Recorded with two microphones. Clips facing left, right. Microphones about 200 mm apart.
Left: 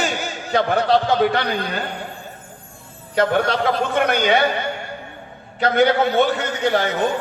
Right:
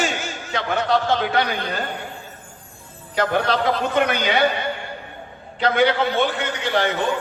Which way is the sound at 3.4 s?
50° left (ahead or behind).